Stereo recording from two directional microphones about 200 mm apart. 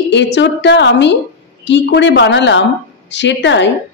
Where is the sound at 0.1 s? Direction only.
60° left (ahead or behind).